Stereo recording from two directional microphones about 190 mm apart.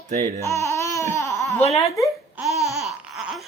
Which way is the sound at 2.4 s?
10° right (ahead or behind).